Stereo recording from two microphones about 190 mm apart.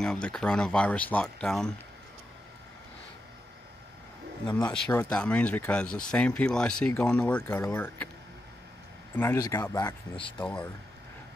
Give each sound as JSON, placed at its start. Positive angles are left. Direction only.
{"t": 0.0, "sound": "speech", "side_deg": 5}
{"t": 4.7, "sound": "speech", "side_deg": 5}
{"t": 9.1, "sound": "speech", "side_deg": 15}
{"t": 10.4, "sound": "speech", "side_deg": 5}